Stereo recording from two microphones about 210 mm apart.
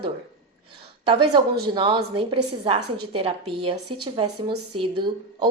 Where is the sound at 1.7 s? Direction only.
25° right (ahead or behind).